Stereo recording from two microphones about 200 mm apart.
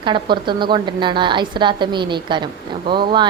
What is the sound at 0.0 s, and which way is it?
A woman's voice, 25° right (ahead or behind).